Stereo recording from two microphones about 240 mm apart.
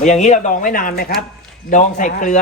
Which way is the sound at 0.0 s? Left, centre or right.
Left.